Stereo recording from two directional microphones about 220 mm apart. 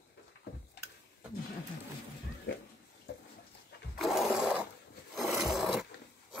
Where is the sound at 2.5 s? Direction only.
50° left (ahead or behind).